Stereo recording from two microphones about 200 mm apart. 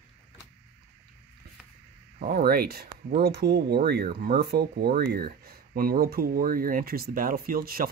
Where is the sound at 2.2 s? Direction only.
45° right (ahead or behind).